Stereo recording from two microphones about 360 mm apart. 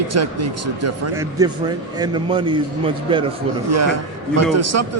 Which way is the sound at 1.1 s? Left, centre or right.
Centre.